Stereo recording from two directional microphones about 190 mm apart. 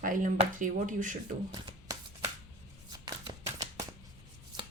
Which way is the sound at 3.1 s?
20° right (ahead or behind).